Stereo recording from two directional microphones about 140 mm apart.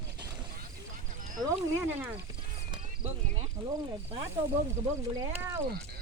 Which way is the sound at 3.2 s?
55° right (ahead or behind).